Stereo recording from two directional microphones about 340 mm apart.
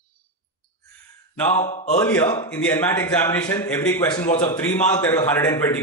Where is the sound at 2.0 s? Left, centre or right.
Centre.